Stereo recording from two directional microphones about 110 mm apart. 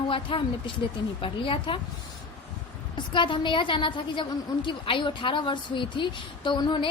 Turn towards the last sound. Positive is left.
turn(degrees=45)  # may be behind; listen again after turning